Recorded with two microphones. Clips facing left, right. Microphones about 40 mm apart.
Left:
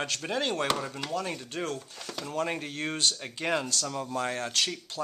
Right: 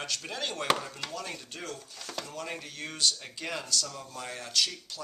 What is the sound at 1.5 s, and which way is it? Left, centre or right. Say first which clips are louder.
Speech: left 7 dB; left.